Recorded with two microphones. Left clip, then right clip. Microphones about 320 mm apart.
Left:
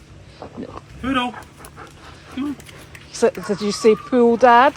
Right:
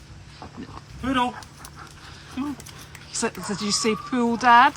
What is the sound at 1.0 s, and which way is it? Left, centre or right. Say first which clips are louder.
Speech: left 2 dB; centre.